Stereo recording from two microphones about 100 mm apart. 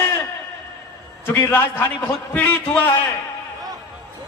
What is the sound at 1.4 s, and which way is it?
A man's voice, 25° left (ahead or behind).